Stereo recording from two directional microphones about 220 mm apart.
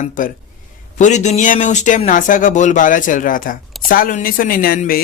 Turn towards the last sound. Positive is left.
turn(degrees=40)  # may be behind; listen again after turning